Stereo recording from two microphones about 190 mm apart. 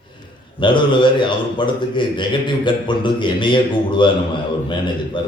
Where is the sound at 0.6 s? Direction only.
25° left (ahead or behind).